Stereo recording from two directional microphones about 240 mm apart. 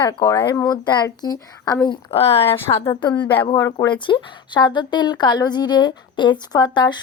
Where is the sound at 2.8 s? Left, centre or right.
Centre.